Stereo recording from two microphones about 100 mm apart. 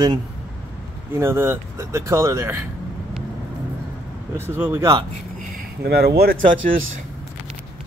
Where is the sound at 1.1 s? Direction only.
25° right (ahead or behind).